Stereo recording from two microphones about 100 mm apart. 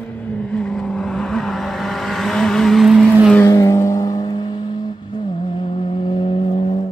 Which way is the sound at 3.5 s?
35° left (ahead or behind).